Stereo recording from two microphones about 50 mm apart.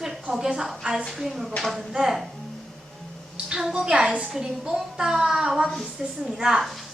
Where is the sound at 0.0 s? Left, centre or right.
Centre.